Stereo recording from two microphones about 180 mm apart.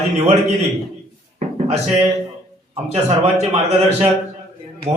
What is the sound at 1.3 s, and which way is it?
Drawer open or close, 40° right (ahead or behind).